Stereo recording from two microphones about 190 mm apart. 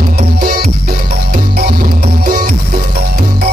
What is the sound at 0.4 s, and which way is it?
Music, 55° right (ahead or behind).